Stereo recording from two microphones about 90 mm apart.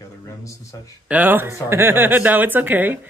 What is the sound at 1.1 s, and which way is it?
Speech, 20° right (ahead or behind).